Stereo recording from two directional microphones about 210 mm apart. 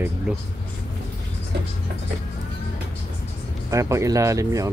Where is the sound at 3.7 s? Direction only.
15° right (ahead or behind).